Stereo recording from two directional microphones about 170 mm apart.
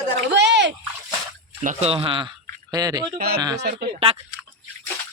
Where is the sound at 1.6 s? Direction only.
35° right (ahead or behind).